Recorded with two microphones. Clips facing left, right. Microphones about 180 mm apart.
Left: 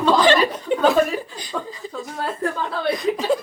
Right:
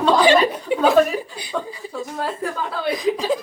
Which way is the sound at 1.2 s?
10° right (ahead or behind).